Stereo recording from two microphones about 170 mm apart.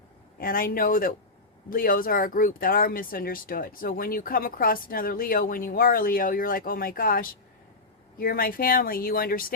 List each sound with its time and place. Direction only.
0.3 s speech: 55° left (ahead or behind)